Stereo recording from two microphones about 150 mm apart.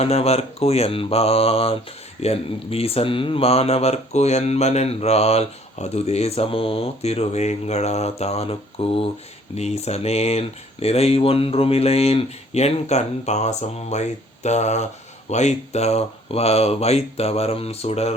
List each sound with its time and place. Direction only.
0.0 s speech: 45° left (ahead or behind)